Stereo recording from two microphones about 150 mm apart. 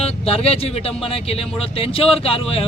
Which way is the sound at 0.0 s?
40° left (ahead or behind).